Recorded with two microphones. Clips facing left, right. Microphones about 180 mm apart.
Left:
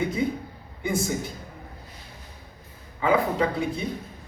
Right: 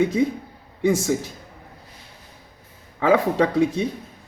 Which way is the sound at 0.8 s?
90° right.